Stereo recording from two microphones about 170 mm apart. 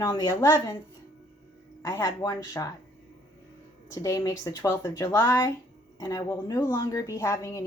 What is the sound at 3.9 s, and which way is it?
A woman's voice, 20° left (ahead or behind).